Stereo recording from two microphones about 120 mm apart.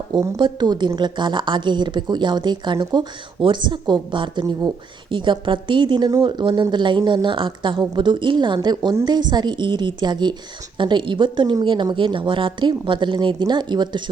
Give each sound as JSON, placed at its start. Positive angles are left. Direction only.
{"t": 0.1, "sound": "a woman's voice", "side_deg": -40}